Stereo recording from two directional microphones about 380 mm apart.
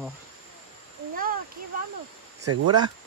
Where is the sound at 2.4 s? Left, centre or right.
Right.